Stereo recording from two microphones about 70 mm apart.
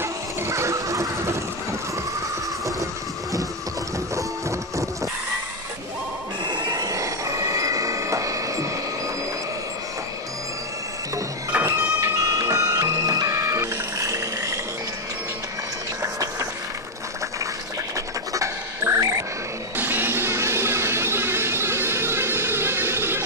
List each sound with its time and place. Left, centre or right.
0.0 s vehicle: right
4.1 s music: right
6.4 s train: right
6.8 s train: right
11.6 s music: right
12.2 s music: right
16.0 s a sound: right
17.9 s a sound: right
19.8 s music: right